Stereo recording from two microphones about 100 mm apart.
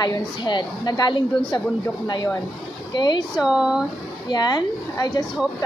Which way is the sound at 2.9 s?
50° left (ahead or behind).